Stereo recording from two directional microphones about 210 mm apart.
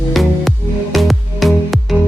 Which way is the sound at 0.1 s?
Centre (ahead or behind).